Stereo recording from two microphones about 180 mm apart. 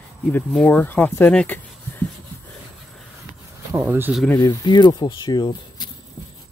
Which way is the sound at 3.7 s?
10° right (ahead or behind).